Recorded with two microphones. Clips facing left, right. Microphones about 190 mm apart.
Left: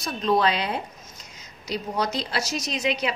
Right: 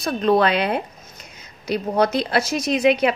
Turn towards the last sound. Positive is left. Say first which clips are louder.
# right 9 dB
turn(degrees=-55)  # may be behind; listen again after turning